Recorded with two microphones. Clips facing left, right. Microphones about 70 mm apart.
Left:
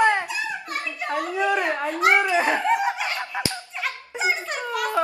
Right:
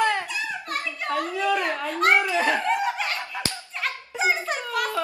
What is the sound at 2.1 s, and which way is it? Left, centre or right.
Snicker, left.